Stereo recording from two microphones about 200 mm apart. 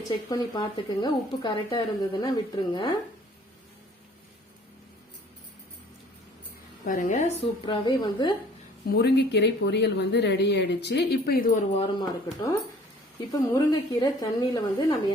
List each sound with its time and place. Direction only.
0.3 s speech: 20° left (ahead or behind)
6.8 s a woman's voice: 40° left (ahead or behind)
7.6 s speech: 25° left (ahead or behind)
8.9 s speech: 55° left (ahead or behind)
11.8 s speech: 20° left (ahead or behind)